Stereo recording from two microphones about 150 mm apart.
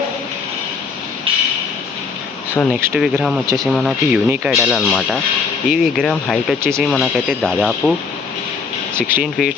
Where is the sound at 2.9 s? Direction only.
5° right (ahead or behind).